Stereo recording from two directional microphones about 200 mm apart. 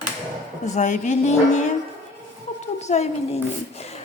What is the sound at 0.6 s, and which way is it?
Speech, 35° left (ahead or behind).